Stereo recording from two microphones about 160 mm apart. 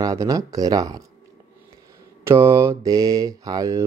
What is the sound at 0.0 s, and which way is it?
Speech, 20° right (ahead or behind).